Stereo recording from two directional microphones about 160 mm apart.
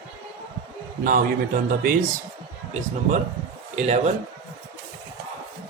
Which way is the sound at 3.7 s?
45° right (ahead or behind).